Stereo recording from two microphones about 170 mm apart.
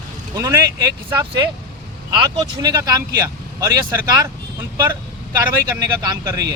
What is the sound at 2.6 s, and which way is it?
Speech, 20° right (ahead or behind).